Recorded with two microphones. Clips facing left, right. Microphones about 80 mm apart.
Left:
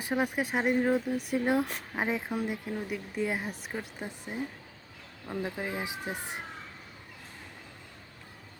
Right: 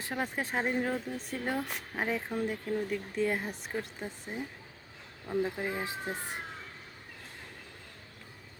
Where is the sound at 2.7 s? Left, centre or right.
Centre.